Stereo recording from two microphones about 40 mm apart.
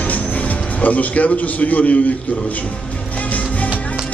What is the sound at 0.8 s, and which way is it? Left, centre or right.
Speech, left.